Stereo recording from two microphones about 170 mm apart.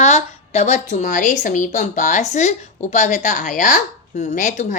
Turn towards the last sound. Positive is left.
turn(degrees=45)  # may be behind; listen again after turning